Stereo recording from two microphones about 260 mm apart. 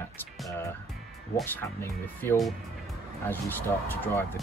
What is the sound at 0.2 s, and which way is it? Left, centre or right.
Speech, centre.